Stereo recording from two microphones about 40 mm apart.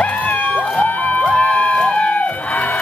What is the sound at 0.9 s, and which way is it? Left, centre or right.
Music, left.